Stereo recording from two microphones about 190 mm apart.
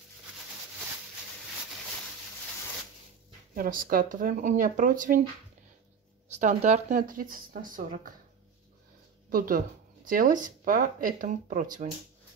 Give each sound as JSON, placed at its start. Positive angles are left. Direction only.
{"t": 3.5, "sound": "speech", "side_deg": -50}
{"t": 6.2, "sound": "speech", "side_deg": -40}
{"t": 9.3, "sound": "speech", "side_deg": -45}